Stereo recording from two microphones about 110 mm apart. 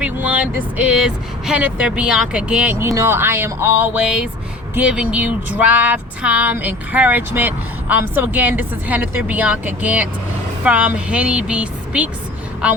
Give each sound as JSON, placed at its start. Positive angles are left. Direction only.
{"t": 0.0, "sound": "speech", "side_deg": -15}
{"t": 2.7, "sound": "speech", "side_deg": -25}